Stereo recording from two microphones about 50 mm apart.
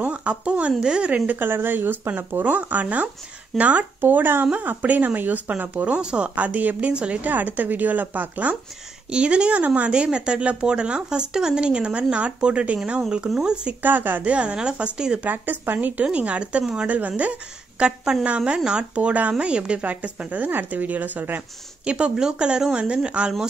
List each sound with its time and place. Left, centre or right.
0.0 s a woman's voice: right
2.5 s a woman's voice: right
4.0 s speech: right
4.5 s a woman's voice: right
5.9 s a woman's voice: right
9.1 s speech: centre
13.8 s a woman's voice: right
14.3 s speech: right
15.2 s a woman's voice: right
16.1 s a woman's voice: right
21.8 s speech: right